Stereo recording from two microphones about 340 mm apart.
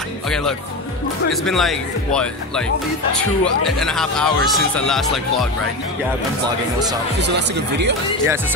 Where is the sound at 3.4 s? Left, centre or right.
Centre.